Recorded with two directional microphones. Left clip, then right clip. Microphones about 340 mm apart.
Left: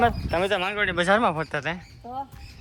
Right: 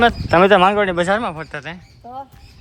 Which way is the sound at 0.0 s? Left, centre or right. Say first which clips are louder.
Right 10 dB; right.